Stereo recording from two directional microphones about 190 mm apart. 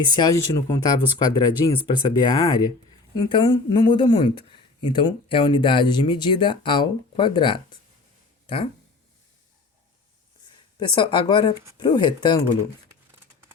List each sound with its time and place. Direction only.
0.2 s speech: 20° left (ahead or behind)
10.8 s speech: 25° left (ahead or behind)